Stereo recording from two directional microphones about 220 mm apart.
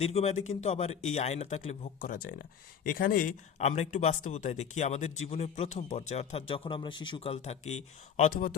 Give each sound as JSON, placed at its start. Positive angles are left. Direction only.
{"t": 0.0, "sound": "a man's voice", "side_deg": 30}